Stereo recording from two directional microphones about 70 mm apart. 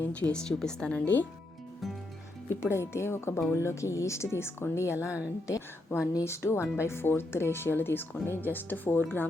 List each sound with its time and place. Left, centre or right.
0.0 s speech: centre
2.6 s speech: left